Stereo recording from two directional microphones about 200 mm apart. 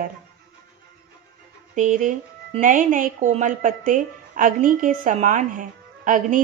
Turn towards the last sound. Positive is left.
turn(degrees=-40)  # may be behind; listen again after turning